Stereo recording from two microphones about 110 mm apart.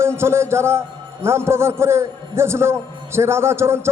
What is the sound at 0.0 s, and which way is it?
A man's voice, 25° right (ahead or behind).